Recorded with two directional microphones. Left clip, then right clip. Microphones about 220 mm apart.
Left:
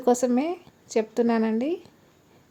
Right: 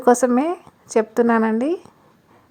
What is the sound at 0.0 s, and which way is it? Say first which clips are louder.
A woman's voice: right 7 dB; 15° right (ahead or behind).